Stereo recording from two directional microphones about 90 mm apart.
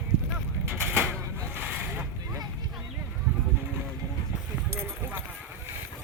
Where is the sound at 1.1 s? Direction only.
25° right (ahead or behind).